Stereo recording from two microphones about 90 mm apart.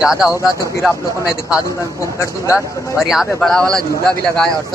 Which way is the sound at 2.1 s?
35° left (ahead or behind).